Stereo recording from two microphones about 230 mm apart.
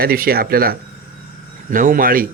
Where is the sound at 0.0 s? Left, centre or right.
Right.